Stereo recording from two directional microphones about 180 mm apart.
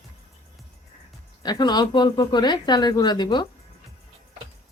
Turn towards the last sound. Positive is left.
turn(degrees=25)  # may be behind; listen again after turning